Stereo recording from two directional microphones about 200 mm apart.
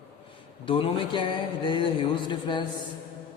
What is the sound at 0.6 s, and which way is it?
Speech, 25° left (ahead or behind).